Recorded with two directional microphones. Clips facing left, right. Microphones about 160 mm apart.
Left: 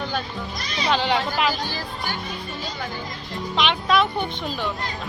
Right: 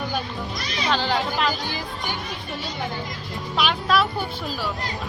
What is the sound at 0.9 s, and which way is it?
Speech, centre (ahead or behind).